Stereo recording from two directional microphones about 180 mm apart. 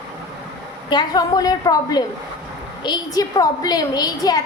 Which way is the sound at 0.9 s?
25° left (ahead or behind).